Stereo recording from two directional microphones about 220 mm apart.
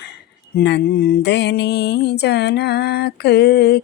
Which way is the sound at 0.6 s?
45° left (ahead or behind).